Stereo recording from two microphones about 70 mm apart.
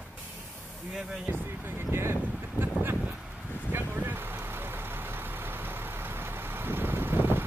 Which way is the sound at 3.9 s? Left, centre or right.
Right.